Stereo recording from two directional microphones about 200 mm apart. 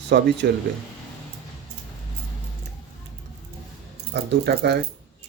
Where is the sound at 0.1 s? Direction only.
55° right (ahead or behind).